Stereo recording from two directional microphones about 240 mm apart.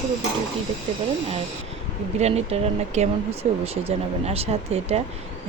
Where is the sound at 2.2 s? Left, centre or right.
Right.